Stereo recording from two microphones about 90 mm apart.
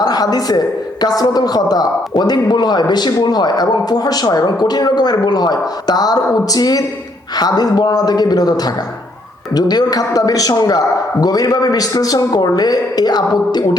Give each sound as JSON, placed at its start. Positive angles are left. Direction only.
{"t": 0.0, "sound": "a woman's voice", "side_deg": 45}